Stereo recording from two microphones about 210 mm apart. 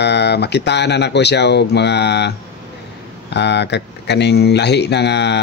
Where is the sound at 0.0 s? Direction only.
55° left (ahead or behind).